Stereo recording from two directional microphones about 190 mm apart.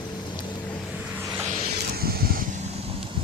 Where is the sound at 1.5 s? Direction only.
50° right (ahead or behind).